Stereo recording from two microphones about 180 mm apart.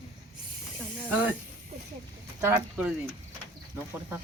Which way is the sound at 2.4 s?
10° right (ahead or behind).